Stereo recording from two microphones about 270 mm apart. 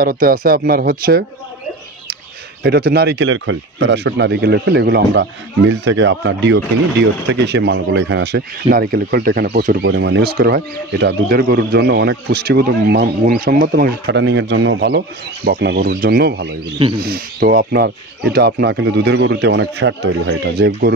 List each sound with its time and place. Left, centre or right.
0.0 s speech: right
2.6 s speech: right
9.8 s speech: right